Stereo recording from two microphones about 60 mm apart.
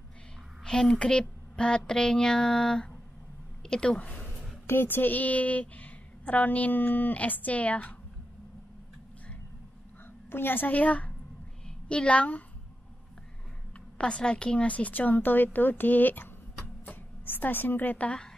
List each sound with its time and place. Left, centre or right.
0.7 s a woman's voice: centre
4.6 s a woman's voice: left
10.3 s a woman's voice: left
13.9 s a woman's voice: centre